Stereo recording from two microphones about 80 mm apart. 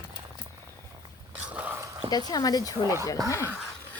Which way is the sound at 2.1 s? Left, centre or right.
Left.